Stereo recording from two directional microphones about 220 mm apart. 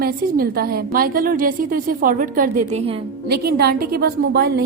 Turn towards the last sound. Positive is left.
turn(degrees=-45)  # may be behind; listen again after turning